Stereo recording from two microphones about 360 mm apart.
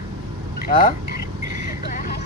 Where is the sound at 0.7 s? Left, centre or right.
Left.